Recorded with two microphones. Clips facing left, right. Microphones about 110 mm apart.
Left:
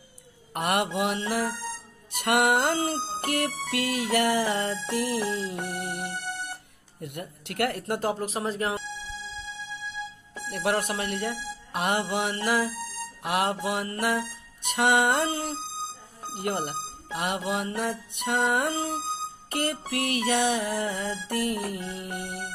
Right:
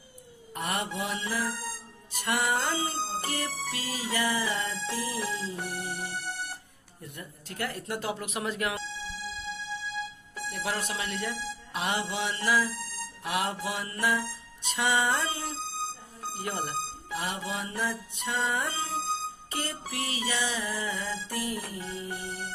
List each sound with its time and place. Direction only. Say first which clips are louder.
0.5 s a man's voice: left 6 dB; 60° left (ahead or behind)
0.9 s music: left 5 dB; 60° left (ahead or behind); by 6.1 s 75° left (ahead or behind)
7.0 s speech: left 7 dB; 65° left (ahead or behind); by 8.8 s 35° left (ahead or behind)
10.5 s speech: left 7 dB; 55° left (ahead or behind)
13.2 s music: left 4 dB; 55° left (ahead or behind)